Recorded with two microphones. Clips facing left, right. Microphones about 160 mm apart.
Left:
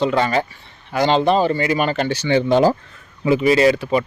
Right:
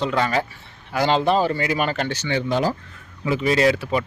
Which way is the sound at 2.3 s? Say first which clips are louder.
Left 8 dB; 25° left (ahead or behind).